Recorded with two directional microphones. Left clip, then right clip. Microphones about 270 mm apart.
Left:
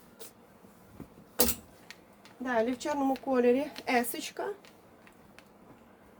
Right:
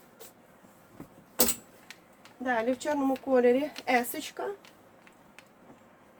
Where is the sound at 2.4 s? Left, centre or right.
Centre.